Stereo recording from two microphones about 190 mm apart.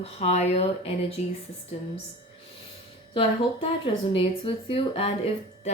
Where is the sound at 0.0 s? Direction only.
35° left (ahead or behind).